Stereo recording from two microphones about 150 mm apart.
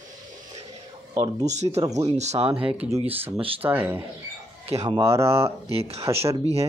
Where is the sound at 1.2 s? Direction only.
45° right (ahead or behind).